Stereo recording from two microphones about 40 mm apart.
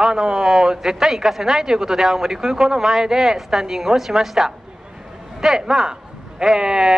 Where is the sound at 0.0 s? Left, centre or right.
Centre.